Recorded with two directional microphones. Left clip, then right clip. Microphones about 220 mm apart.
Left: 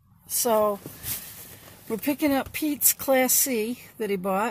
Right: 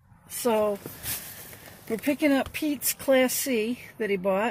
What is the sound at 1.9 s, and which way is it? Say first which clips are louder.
Speech: right 1 dB; 15° left (ahead or behind).